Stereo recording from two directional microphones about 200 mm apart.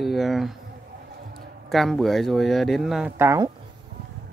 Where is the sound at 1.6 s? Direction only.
Centre (ahead or behind).